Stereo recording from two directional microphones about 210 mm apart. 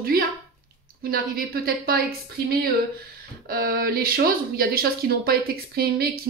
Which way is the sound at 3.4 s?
45° right (ahead or behind).